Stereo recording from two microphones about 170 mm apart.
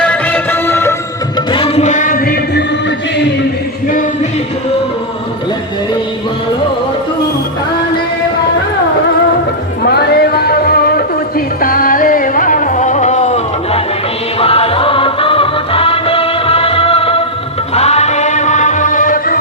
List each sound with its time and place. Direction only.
0.0 s music: 10° left (ahead or behind)
1.5 s music: 30° left (ahead or behind); by 2.6 s 60° left (ahead or behind)
3.8 s music: 50° left (ahead or behind)
9.8 s music: 65° left (ahead or behind)